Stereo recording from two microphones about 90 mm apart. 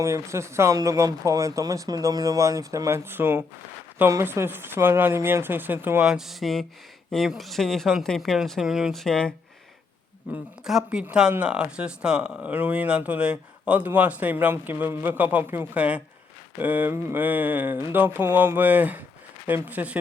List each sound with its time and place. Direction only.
0.0 s speech: 30° right (ahead or behind)
6.0 s speech: 5° right (ahead or behind); by 9.3 s 10° left (ahead or behind)
10.3 s speech: 15° right (ahead or behind)
10.6 s speech: 5° right (ahead or behind)